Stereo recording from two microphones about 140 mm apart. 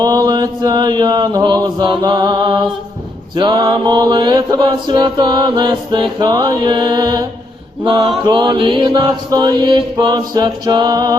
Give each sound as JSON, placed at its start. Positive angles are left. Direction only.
{"t": 0.0, "sound": "chant", "side_deg": -30}
{"t": 3.3, "sound": "mantra", "side_deg": -30}